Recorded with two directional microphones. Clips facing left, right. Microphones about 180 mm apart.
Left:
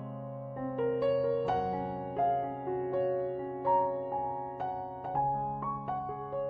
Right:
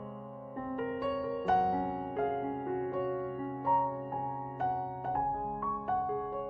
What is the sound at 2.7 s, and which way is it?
Music, centre (ahead or behind).